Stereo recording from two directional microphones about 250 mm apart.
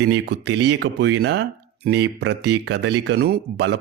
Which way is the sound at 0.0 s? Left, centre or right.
Right.